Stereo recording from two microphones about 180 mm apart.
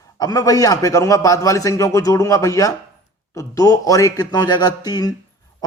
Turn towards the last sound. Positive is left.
turn(degrees=20)  # may be behind; listen again after turning